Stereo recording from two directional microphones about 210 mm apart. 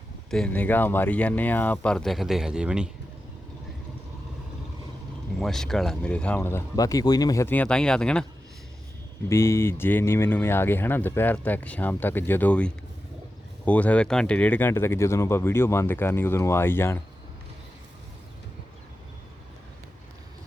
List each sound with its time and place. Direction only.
0.3 s speech: 5° left (ahead or behind)
5.4 s speech: centre (ahead or behind)
9.3 s speech: 10° left (ahead or behind)